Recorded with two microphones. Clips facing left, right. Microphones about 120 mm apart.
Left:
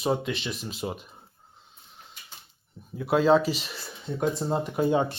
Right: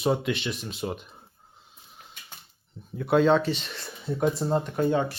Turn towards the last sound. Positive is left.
turn(degrees=15)  # may be behind; listen again after turning